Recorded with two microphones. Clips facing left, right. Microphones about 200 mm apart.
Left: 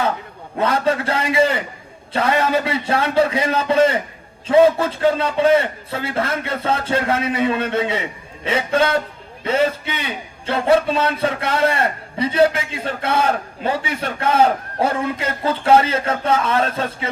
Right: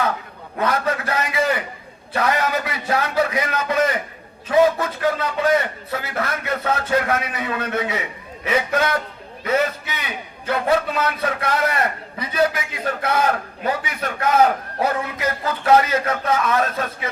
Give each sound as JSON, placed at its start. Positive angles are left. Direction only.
{"t": 0.6, "sound": "a man's voice", "side_deg": 30}